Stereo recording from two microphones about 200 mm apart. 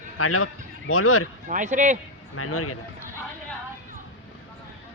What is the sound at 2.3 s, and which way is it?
Speech, 90° left.